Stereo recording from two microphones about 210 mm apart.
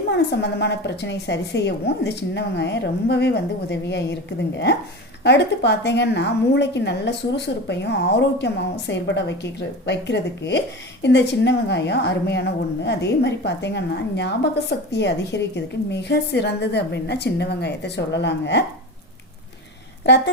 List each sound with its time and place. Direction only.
0.3 s a woman's voice: 55° left (ahead or behind)
20.1 s a woman's voice: 55° left (ahead or behind)